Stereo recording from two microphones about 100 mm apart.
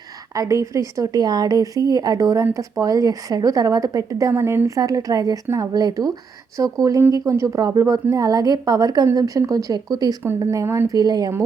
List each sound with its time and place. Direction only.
0.3 s speech: 30° right (ahead or behind)
10.9 s speech: 40° right (ahead or behind)